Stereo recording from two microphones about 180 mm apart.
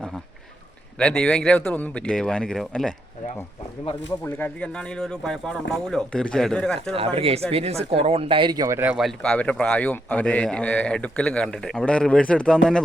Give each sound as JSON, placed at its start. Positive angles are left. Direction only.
{"t": 0.9, "sound": "speech", "side_deg": 5}
{"t": 4.4, "sound": "speech", "side_deg": 5}
{"t": 6.9, "sound": "speech", "side_deg": -30}